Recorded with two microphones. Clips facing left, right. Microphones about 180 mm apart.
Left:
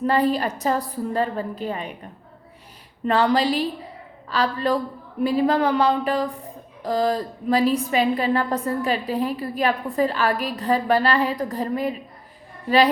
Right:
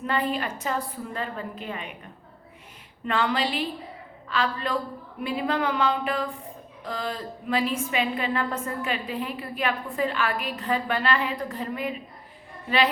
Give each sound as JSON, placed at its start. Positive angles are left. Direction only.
{"t": 0.0, "sound": "a woman's voice", "side_deg": 35}
{"t": 3.1, "sound": "a woman's voice", "side_deg": 35}